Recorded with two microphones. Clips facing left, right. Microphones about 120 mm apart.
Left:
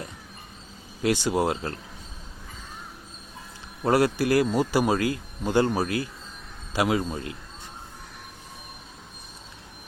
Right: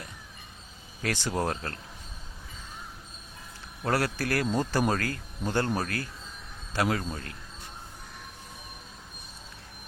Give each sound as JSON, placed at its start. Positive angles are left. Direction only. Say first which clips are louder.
{"t": 1.0, "sound": "speech", "louder": "left 6 dB", "side_deg": 15}
{"t": 3.8, "sound": "a man's voice", "louder": "left 7 dB", "side_deg": 20}